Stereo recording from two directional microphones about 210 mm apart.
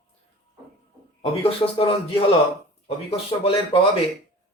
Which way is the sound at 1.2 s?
25° left (ahead or behind).